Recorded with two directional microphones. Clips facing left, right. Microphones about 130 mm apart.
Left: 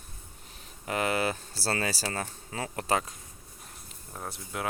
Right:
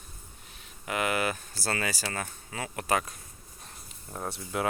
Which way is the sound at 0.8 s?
35° left (ahead or behind).